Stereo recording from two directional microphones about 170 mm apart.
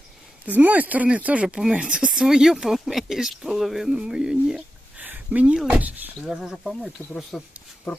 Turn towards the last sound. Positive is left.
turn(degrees=0)  # may be behind; listen again after turning